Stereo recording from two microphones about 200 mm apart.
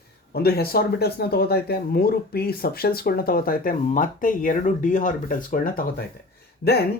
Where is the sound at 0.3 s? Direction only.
50° left (ahead or behind).